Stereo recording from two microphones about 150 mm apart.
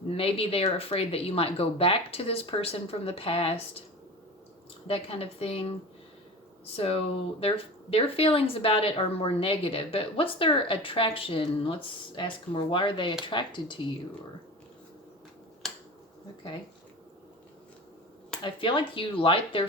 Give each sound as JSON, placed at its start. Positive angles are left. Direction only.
{"t": 0.1, "sound": "speech", "side_deg": 40}
{"t": 4.9, "sound": "speech", "side_deg": 40}
{"t": 18.4, "sound": "speech", "side_deg": 35}